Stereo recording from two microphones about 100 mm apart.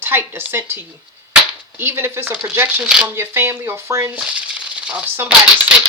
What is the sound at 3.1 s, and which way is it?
Speech, 25° right (ahead or behind).